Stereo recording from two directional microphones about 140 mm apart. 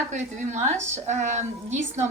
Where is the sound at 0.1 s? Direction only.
55° right (ahead or behind).